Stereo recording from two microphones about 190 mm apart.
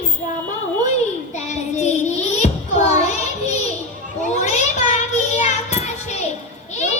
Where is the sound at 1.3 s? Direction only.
35° left (ahead or behind).